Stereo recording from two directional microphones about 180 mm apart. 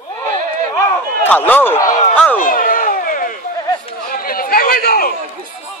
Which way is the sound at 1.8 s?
45° left (ahead or behind).